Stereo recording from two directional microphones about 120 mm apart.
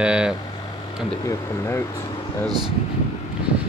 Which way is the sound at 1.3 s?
25° left (ahead or behind).